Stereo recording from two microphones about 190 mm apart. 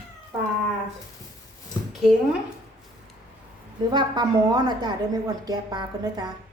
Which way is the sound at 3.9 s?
20° right (ahead or behind).